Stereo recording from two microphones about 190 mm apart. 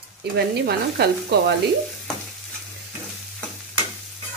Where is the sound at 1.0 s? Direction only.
60° right (ahead or behind).